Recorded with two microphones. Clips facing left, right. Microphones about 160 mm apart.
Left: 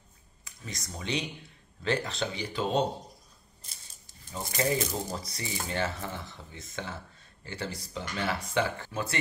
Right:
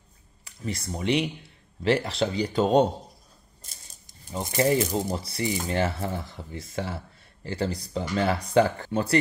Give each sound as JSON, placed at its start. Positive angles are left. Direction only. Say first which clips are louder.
{"t": 0.5, "sound": "speech", "louder": "right 10 dB", "side_deg": -30}
{"t": 4.3, "sound": "speech", "louder": "right 6 dB", "side_deg": -30}